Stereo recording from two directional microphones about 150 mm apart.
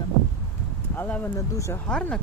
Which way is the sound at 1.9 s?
5° left (ahead or behind).